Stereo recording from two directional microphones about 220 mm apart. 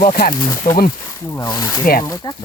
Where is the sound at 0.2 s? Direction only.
50° left (ahead or behind).